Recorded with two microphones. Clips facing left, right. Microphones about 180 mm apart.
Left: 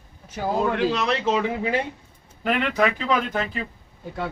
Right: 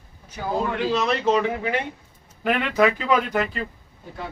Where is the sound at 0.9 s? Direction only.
Centre (ahead or behind).